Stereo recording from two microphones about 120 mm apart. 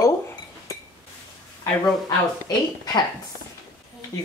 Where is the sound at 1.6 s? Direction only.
30° left (ahead or behind).